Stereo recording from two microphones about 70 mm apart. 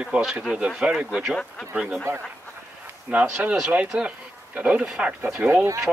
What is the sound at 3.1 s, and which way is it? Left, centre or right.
Speech, right.